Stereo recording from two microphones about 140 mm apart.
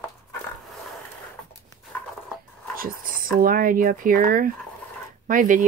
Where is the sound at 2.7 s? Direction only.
90° right.